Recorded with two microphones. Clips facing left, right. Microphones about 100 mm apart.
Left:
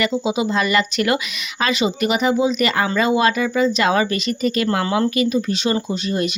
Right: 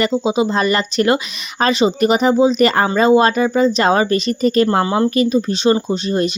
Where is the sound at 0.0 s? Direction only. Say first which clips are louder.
Right 4 dB; 30° right (ahead or behind).